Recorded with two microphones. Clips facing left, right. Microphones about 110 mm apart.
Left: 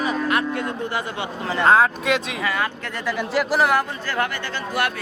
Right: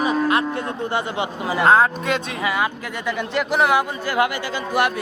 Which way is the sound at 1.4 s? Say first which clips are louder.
Right 1 dB; 10° right (ahead or behind).